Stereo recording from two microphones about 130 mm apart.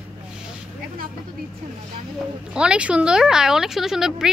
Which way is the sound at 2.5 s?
5° right (ahead or behind).